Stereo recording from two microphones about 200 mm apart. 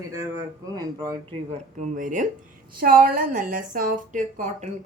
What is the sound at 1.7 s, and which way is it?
A woman's voice, 40° right (ahead or behind).